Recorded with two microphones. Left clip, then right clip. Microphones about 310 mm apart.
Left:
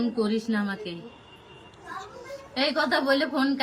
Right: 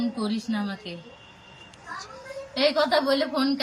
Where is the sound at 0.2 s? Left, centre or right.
Centre.